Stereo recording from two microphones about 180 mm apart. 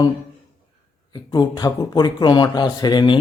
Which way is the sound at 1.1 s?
25° left (ahead or behind).